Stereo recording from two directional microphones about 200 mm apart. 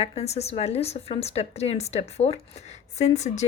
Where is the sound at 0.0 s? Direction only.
30° left (ahead or behind).